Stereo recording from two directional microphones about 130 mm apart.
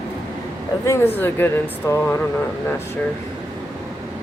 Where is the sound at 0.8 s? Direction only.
20° left (ahead or behind).